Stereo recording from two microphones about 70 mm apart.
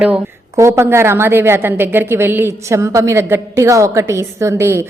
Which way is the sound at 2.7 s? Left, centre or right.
Right.